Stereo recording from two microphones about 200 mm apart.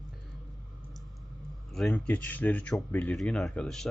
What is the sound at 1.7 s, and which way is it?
Speech, 5° left (ahead or behind).